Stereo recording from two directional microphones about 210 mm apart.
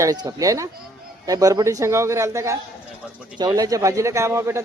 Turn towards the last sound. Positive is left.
turn(degrees=-10)  # may be behind; listen again after turning